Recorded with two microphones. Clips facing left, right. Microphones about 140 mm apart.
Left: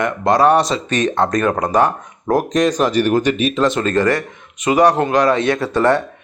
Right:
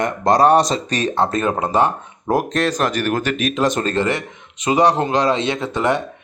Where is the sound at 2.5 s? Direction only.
10° left (ahead or behind).